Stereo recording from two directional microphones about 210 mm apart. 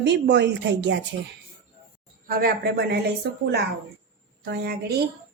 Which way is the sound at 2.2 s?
45° right (ahead or behind).